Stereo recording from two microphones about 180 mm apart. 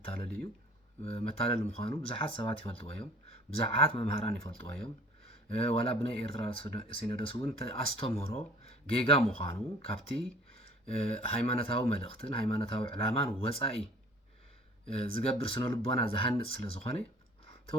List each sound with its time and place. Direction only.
1.0 s speech: 35° left (ahead or behind)
14.8 s speech: 35° left (ahead or behind)